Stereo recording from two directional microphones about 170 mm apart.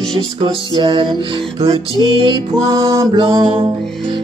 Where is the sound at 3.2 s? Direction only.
30° right (ahead or behind).